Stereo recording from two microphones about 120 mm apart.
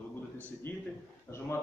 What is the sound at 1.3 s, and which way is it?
Speech, 20° left (ahead or behind).